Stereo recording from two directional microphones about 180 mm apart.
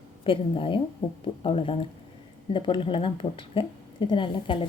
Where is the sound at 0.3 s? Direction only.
30° left (ahead or behind).